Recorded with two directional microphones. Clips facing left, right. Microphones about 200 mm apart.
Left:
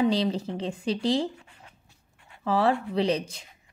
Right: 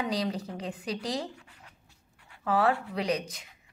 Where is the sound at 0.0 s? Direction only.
25° left (ahead or behind).